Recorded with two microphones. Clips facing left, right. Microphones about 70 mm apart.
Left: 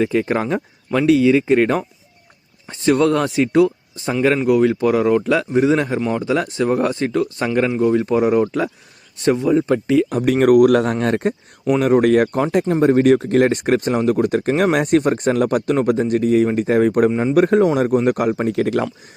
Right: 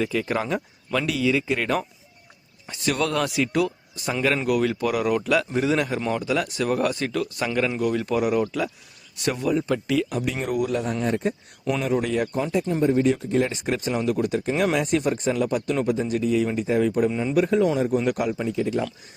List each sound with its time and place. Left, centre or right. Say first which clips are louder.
0.0 s speech: left 6 dB; left
10.1 s speech: left 12 dB; left
11.0 s speech: left 6 dB; left
11.8 s speech: left 11 dB; left
12.6 s speech: left 7 dB; left